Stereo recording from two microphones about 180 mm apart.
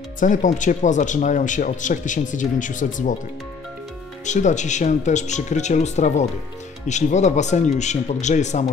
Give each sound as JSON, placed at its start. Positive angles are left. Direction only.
{"t": 0.2, "sound": "speech", "side_deg": 45}
{"t": 4.3, "sound": "speech", "side_deg": 40}